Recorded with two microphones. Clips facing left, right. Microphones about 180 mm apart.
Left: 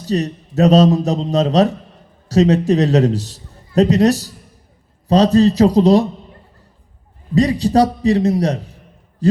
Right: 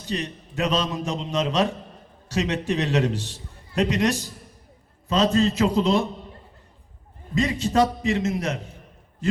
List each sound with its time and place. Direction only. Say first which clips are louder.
0.0 s a man's voice: left 10 dB; 40° left (ahead or behind)
7.3 s a man's voice: left 7 dB; 35° left (ahead or behind)